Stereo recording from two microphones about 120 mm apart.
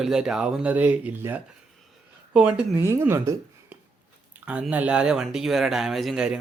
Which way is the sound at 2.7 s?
20° right (ahead or behind).